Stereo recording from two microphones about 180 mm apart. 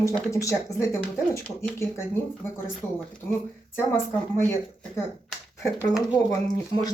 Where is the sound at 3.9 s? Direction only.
5° left (ahead or behind).